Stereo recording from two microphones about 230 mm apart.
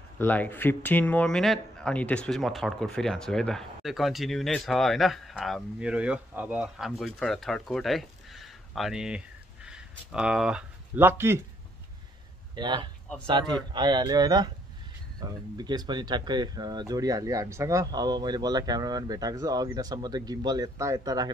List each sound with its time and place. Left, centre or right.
0.2 s speech: centre
12.5 s speech: centre